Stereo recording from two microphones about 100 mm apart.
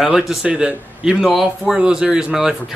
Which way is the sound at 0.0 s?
Centre (ahead or behind).